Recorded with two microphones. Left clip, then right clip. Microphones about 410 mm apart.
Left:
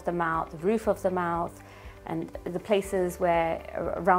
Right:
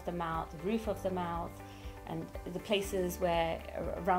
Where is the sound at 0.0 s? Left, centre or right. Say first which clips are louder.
Left 9 dB; left.